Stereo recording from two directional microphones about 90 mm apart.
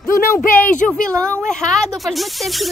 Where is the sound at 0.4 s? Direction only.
20° left (ahead or behind).